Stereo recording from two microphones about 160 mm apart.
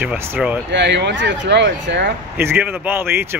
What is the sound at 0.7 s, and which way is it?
Speech, 90° right.